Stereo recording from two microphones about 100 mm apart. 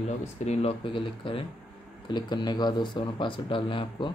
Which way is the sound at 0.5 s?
80° left.